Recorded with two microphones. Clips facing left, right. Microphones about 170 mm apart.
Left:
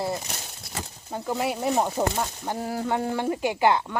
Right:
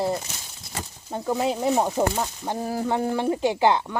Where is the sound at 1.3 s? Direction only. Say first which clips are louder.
Right 3 dB; 20° right (ahead or behind).